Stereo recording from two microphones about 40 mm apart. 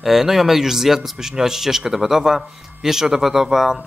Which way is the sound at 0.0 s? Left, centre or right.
Centre.